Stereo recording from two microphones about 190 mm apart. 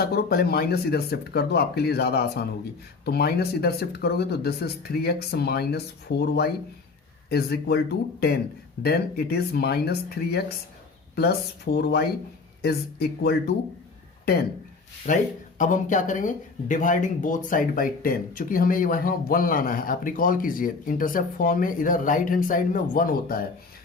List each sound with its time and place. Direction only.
0.0 s speech: 55° left (ahead or behind)
8.8 s speech: 55° left (ahead or behind)
15.0 s speech: 45° left (ahead or behind)